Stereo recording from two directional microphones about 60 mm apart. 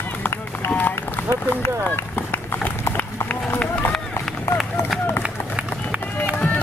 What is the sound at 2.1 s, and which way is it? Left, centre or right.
Run, left.